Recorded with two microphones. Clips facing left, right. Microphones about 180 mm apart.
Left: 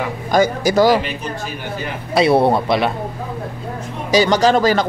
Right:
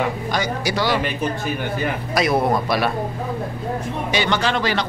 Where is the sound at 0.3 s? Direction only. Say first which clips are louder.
Left 7 dB; 45° left (ahead or behind).